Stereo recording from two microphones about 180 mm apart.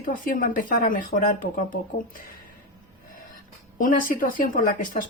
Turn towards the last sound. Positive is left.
turn(degrees=50)  # may be behind; listen again after turning